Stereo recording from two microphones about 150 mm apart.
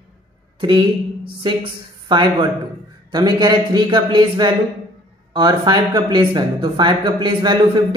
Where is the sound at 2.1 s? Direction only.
30° right (ahead or behind).